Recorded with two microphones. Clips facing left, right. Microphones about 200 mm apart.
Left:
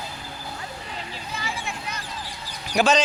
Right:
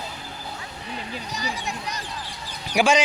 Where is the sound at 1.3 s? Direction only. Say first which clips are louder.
Right 1 dB; 40° right (ahead or behind).